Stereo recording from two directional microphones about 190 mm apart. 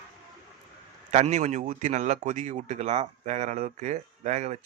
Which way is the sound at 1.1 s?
35° right (ahead or behind).